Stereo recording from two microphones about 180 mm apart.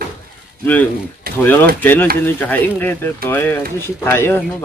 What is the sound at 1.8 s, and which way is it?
Speech, 10° left (ahead or behind).